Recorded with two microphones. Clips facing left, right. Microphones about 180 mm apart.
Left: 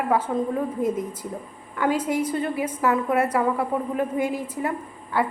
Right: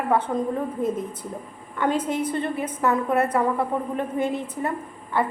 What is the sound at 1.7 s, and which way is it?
A woman's voice, 5° left (ahead or behind).